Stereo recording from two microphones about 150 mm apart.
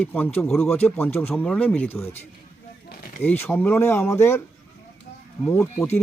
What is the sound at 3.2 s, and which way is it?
Speech, 15° left (ahead or behind).